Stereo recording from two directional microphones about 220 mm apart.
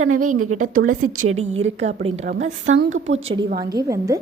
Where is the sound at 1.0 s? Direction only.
70° right (ahead or behind).